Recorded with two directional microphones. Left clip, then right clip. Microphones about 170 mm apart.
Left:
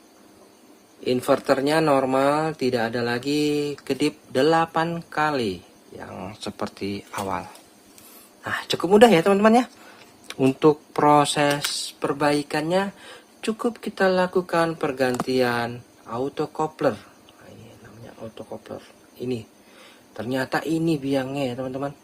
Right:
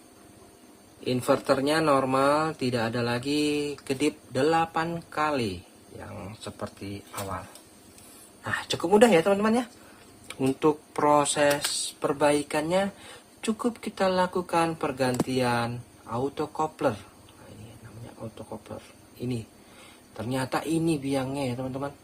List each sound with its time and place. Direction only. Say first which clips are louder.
1.0 s speech: left 4 dB; 20° left (ahead or behind)
6.4 s speech: left 7 dB; 60° left (ahead or behind)
8.4 s speech: left 4 dB; 30° left (ahead or behind)
10.2 s speech: left 6 dB; 30° left (ahead or behind)
20.1 s speech: left 4 dB; 20° left (ahead or behind)